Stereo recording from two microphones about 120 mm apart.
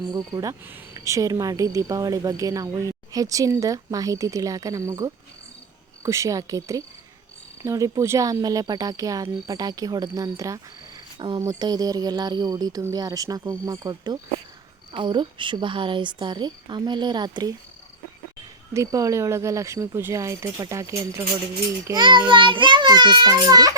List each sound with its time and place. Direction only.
0.1 s a woman's voice: 35° right (ahead or behind)
18.7 s speech: 25° right (ahead or behind)
21.9 s a woman's voice: 40° right (ahead or behind)